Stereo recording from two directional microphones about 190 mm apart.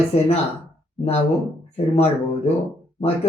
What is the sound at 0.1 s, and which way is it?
Speech, 35° left (ahead or behind).